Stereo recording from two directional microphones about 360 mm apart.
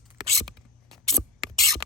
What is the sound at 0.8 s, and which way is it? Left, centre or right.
Scissors, centre.